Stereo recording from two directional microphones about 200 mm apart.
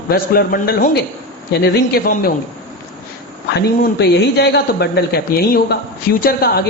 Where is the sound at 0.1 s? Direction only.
50° left (ahead or behind).